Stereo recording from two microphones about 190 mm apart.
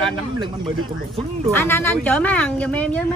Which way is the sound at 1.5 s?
10° left (ahead or behind).